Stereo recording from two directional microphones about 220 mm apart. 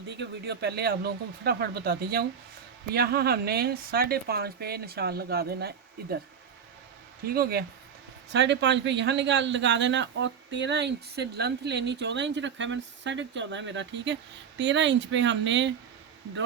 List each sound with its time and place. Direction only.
0.1 s speech: 50° right (ahead or behind)
7.3 s speech: 45° right (ahead or behind)